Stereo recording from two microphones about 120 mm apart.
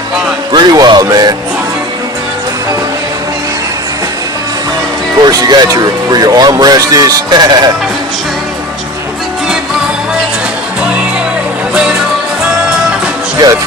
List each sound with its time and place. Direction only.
0.5 s speech: 40° right (ahead or behind)
5.2 s speech: 35° right (ahead or behind)
11.7 s music: 5° right (ahead or behind)
13.3 s music: 30° right (ahead or behind)